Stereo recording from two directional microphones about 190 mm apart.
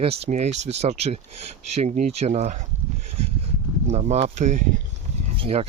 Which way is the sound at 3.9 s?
35° right (ahead or behind).